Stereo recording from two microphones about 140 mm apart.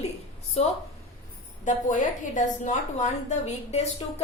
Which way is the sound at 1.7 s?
65° left (ahead or behind).